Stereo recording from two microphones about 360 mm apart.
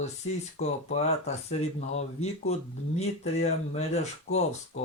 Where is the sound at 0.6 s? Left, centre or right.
Centre.